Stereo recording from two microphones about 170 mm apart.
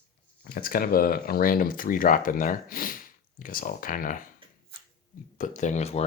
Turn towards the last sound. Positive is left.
turn(degrees=40)  # may be behind; listen again after turning